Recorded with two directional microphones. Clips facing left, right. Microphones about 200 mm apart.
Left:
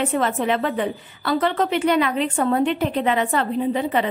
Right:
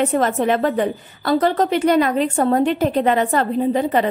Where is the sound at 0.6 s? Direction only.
40° right (ahead or behind).